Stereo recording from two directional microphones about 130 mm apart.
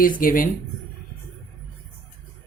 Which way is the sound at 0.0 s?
90° left.